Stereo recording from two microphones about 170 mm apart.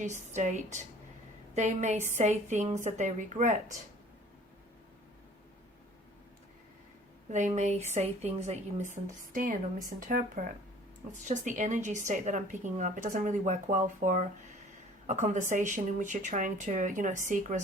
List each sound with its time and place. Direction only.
0.0 s a woman's voice: 45° right (ahead or behind)
7.3 s a woman's voice: 45° right (ahead or behind)